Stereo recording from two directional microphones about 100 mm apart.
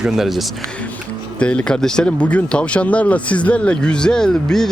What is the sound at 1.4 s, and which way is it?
Speech, 10° left (ahead or behind).